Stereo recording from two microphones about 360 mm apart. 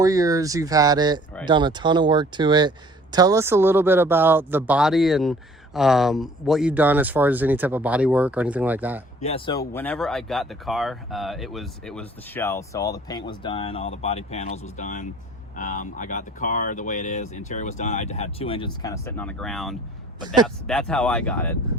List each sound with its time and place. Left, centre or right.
0.0 s speech: centre
9.2 s speech: centre
20.1 s speech: centre
20.7 s speech: centre